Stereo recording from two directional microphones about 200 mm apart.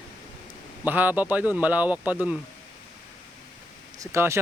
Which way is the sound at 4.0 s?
15° right (ahead or behind).